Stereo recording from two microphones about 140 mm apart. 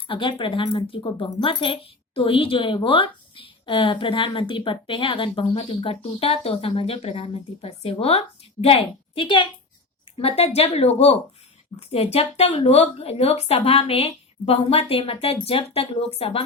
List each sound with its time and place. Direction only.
0.1 s a woman's voice: 40° left (ahead or behind)